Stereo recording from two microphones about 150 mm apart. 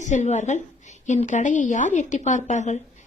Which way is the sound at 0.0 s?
50° left (ahead or behind).